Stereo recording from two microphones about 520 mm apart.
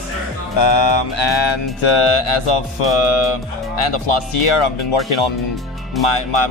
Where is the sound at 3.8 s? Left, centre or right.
Left.